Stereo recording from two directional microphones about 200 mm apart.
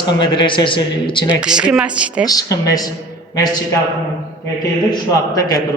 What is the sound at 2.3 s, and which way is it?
Speech, 15° left (ahead or behind).